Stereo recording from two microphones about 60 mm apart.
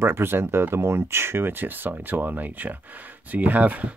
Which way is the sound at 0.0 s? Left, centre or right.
Right.